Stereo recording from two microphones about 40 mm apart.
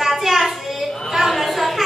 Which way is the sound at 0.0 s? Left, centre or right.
Centre.